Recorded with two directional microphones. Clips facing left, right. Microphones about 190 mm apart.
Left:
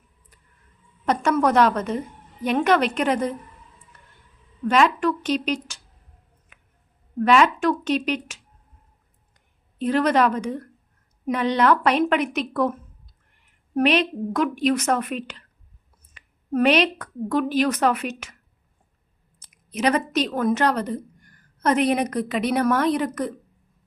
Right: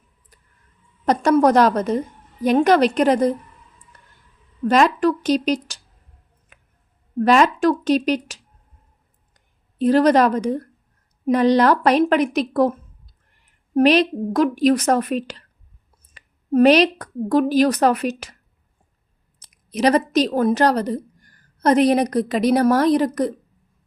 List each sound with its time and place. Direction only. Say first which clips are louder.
1.0 s a woman's voice: right 5 dB; 40° right (ahead or behind)
4.7 s a woman's voice: right 3 dB; 40° right (ahead or behind)
6.5 s a sound: right 4 dB; 35° right (ahead or behind)
7.2 s a woman's voice: right 3 dB; 40° right (ahead or behind)
13.7 s a woman's voice: right 5 dB; 35° right (ahead or behind)
19.4 s a woman's voice: right 5 dB; 35° right (ahead or behind)